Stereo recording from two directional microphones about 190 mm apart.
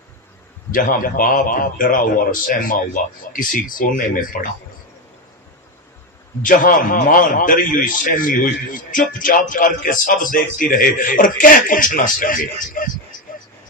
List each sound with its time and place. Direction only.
0.7 s a man's voice: 45° left (ahead or behind)
6.4 s a man's voice: 45° left (ahead or behind)